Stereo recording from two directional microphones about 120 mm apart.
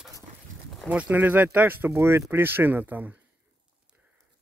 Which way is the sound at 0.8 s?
10° right (ahead or behind).